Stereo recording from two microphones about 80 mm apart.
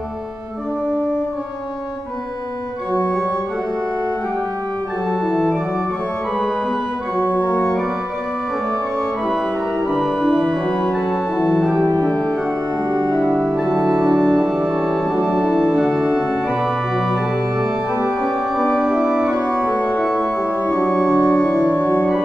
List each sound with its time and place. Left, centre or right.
2.9 s organ: centre
5.1 s organ: centre
7.3 s organ: centre
9.8 s organ: centre
12.1 s music: centre
13.2 s organ: centre
14.0 s music: centre
15.1 s organ: centre
19.7 s organ: centre
20.0 s organ: centre; by 22.1 s left